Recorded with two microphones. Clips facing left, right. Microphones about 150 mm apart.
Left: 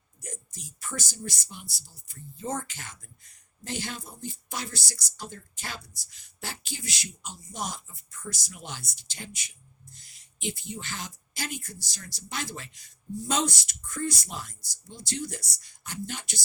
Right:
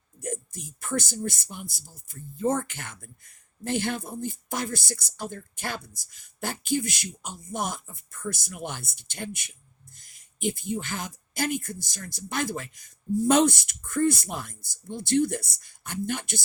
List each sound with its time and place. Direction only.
0.2 s speech: 55° right (ahead or behind)